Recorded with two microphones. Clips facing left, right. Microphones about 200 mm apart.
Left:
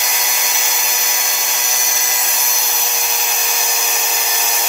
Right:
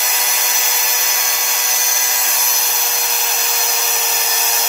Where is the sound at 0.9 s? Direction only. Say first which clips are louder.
Even; 15° left (ahead or behind).